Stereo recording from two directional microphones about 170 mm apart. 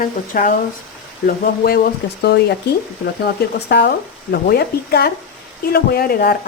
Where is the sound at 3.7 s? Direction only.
70° left (ahead or behind).